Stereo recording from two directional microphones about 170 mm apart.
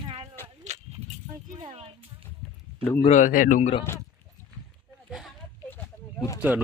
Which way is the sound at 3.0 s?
45° left (ahead or behind).